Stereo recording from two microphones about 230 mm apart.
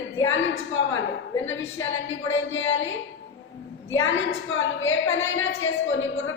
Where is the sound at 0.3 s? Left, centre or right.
Left.